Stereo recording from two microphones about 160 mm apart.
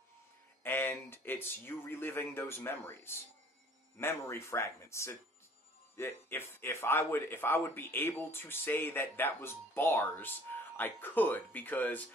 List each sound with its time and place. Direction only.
0.7 s a man's voice: 15° left (ahead or behind)